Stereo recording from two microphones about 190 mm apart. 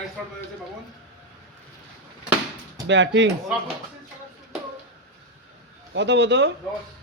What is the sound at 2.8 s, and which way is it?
Speech, 70° right (ahead or behind).